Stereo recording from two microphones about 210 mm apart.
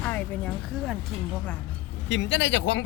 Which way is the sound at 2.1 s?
60° left (ahead or behind).